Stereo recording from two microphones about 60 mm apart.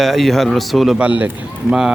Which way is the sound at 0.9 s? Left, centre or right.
Right.